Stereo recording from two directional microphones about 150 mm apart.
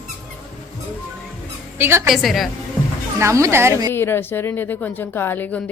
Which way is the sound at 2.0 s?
Centre (ahead or behind).